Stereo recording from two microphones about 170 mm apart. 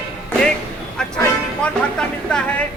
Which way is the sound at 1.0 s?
5° left (ahead or behind).